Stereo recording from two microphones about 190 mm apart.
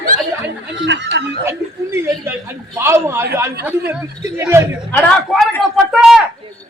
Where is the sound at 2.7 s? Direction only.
15° right (ahead or behind).